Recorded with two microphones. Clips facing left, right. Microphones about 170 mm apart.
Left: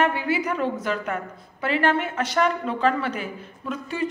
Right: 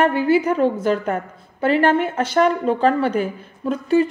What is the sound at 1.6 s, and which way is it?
Speech, 45° right (ahead or behind).